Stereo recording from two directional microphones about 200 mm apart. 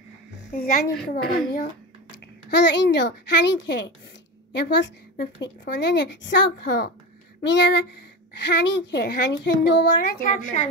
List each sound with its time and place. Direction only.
0.5 s a woman's voice: 50° left (ahead or behind)